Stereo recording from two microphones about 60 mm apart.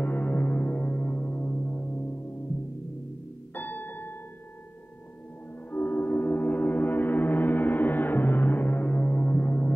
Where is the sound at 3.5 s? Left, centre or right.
Left.